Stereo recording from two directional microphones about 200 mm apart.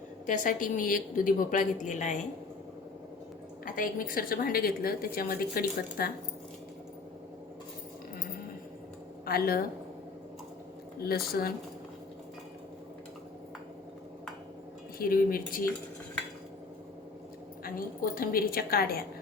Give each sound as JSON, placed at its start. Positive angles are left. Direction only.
{"t": 0.3, "sound": "a woman's voice", "side_deg": 40}
{"t": 3.8, "sound": "a woman's voice", "side_deg": 45}
{"t": 9.2, "sound": "speech", "side_deg": 50}
{"t": 11.0, "sound": "a woman's voice", "side_deg": 50}
{"t": 14.9, "sound": "a woman's voice", "side_deg": 45}
{"t": 17.6, "sound": "a woman's voice", "side_deg": 45}